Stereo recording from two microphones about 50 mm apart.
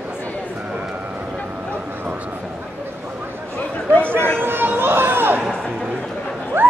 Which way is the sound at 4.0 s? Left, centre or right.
Right.